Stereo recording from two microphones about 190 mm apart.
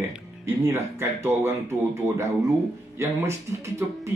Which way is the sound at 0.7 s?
10° right (ahead or behind).